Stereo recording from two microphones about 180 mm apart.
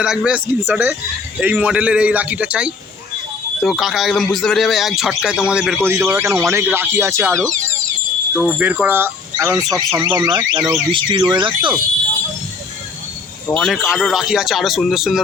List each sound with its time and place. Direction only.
0.0 s speech: 5° right (ahead or behind)
5.9 s speech: 10° right (ahead or behind)
8.4 s speech: centre (ahead or behind); by 11.7 s 25° right (ahead or behind)
13.5 s speech: 5° left (ahead or behind)